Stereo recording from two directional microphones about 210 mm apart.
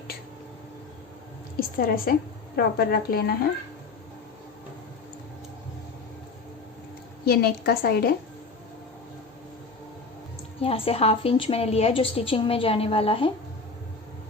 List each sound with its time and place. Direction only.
1.5 s a woman's voice: 45° left (ahead or behind)
7.3 s a woman's voice: 50° left (ahead or behind)
10.6 s a woman's voice: 25° left (ahead or behind)